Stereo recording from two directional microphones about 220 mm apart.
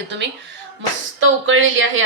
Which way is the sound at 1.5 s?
60° right (ahead or behind).